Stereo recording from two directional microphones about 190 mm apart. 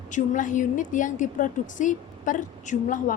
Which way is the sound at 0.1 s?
40° left (ahead or behind).